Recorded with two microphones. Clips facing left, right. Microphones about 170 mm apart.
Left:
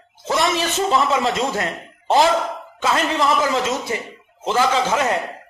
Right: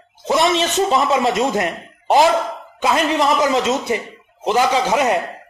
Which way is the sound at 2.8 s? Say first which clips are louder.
Right 3 dB; 15° right (ahead or behind).